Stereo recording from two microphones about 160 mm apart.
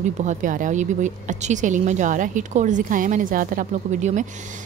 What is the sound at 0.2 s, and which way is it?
Speech, 50° right (ahead or behind).